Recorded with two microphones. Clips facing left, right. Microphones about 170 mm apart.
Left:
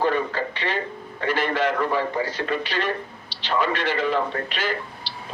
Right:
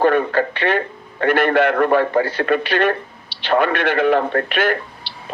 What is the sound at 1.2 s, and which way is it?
A man's voice, 60° right (ahead or behind).